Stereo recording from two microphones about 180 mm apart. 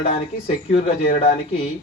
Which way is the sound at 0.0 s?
35° left (ahead or behind).